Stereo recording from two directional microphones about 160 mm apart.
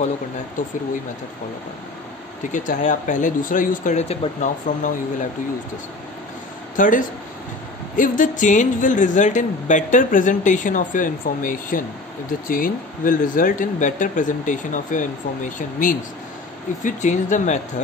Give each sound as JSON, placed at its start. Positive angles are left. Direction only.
{"t": 0.6, "sound": "speech", "side_deg": 55}
{"t": 2.5, "sound": "a woman's voice", "side_deg": 55}
{"t": 6.8, "sound": "a woman's voice", "side_deg": 55}